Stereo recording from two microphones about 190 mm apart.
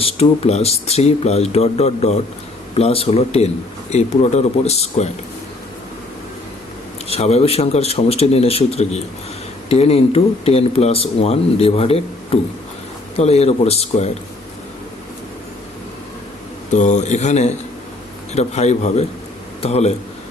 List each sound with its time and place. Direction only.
0.0 s speech: 30° left (ahead or behind)
7.1 s speech: 35° left (ahead or behind)
16.7 s speech: 40° left (ahead or behind)